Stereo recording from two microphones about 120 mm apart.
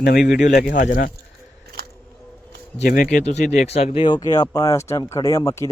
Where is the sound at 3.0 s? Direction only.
90° left; by 4.2 s 50° left (ahead or behind).